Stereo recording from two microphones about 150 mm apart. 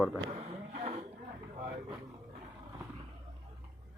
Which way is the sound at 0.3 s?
45° right (ahead or behind).